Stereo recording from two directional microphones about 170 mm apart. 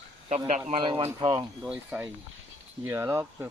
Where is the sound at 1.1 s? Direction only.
25° right (ahead or behind).